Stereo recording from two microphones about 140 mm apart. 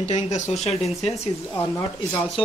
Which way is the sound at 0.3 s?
50° left (ahead or behind).